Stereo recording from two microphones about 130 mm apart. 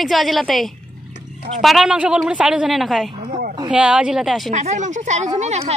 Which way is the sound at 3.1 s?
40° right (ahead or behind).